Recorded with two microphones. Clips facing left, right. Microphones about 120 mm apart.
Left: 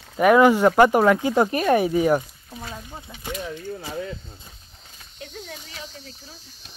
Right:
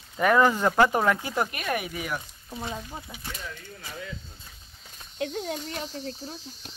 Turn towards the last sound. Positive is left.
turn(degrees=-50)  # may be behind; listen again after turning